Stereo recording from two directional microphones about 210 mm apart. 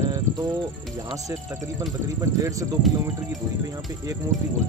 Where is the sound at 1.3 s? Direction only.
15° right (ahead or behind).